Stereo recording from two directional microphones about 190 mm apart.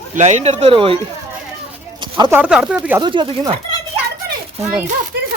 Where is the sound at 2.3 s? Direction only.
5° right (ahead or behind).